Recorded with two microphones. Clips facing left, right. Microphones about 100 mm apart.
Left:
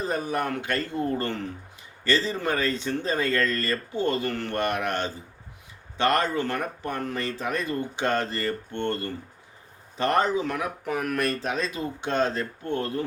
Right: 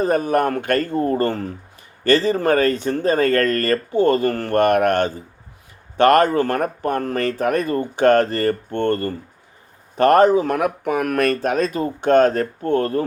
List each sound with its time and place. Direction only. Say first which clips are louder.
0.0 s speech: right 10 dB; 55° right (ahead or behind)
2.0 s speech: right 9 dB; 55° right (ahead or behind)